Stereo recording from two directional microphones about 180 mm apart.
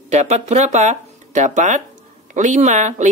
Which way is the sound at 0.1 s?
40° right (ahead or behind).